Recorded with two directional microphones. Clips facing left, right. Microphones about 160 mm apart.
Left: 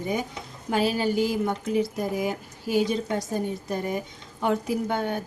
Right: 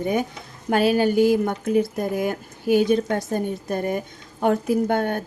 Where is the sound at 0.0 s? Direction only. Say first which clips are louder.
Right 5 dB; 60° right (ahead or behind).